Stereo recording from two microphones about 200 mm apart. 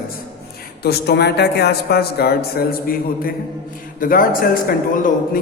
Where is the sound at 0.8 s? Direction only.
55° left (ahead or behind).